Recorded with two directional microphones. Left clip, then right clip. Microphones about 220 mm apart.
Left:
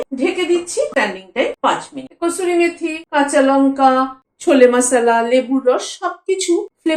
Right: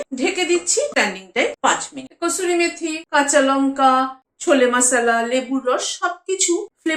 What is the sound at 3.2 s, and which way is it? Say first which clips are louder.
A woman's voice: left 5 dB; 5° right (ahead or behind).